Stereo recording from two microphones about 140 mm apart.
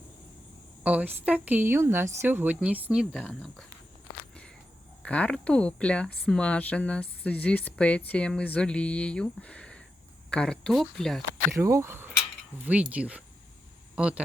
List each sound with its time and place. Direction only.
0.9 s speech: 10° right (ahead or behind)
3.1 s speech: 5° left (ahead or behind)
5.0 s speech: 10° left (ahead or behind)
11.5 s speech: 20° right (ahead or behind)